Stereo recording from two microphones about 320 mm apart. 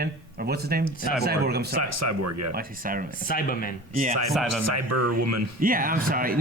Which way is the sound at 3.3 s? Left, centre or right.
Left.